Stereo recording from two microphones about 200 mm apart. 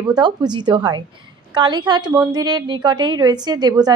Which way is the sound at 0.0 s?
20° right (ahead or behind).